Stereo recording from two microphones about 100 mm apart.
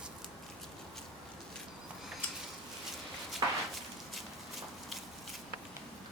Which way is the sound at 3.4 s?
40° right (ahead or behind).